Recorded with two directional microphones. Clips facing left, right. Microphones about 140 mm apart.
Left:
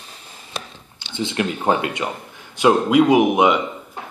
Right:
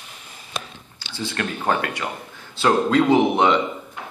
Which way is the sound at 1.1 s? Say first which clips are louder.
Left 5 dB; 20° left (ahead or behind).